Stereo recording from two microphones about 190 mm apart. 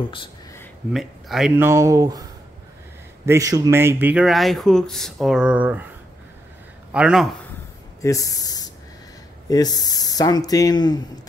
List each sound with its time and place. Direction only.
0.1 s a sound: 25° left (ahead or behind)
0.9 s speech: centre (ahead or behind)
1.7 s speech: 15° right (ahead or behind)
3.3 s speech: 15° right (ahead or behind)
6.9 s speech: 5° right (ahead or behind)
8.0 s speech: 15° left (ahead or behind)